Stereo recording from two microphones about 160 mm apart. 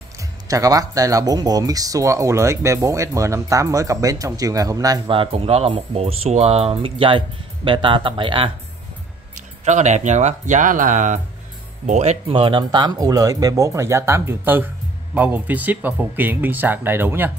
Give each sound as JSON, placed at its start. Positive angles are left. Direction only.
{"t": 0.5, "sound": "speech", "side_deg": -20}
{"t": 9.7, "sound": "speech", "side_deg": -45}